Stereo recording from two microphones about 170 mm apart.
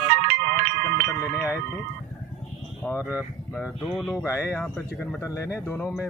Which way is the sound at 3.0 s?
10° right (ahead or behind).